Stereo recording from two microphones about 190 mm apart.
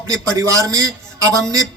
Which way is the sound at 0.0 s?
15° right (ahead or behind).